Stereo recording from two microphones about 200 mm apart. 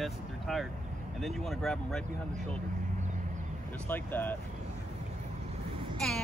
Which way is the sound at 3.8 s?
10° left (ahead or behind).